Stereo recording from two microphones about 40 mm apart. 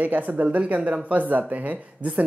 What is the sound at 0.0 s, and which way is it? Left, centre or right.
Speech, right.